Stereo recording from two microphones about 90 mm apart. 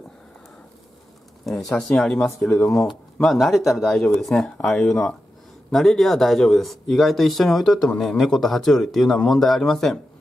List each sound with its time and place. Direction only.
1.4 s speech: 5° left (ahead or behind)
2.5 s speech: 30° left (ahead or behind)
2.9 s speech: 5° left (ahead or behind)